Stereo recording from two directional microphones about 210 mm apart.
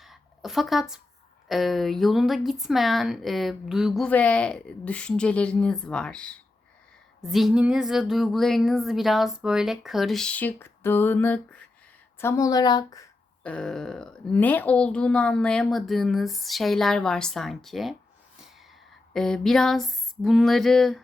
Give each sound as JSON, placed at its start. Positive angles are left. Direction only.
{"t": 0.0, "sound": "a sound", "side_deg": 0}
{"t": 1.5, "sound": "a woman's voice", "side_deg": 0}
{"t": 13.4, "sound": "a woman's voice", "side_deg": 5}
{"t": 19.1, "sound": "a woman's voice", "side_deg": 0}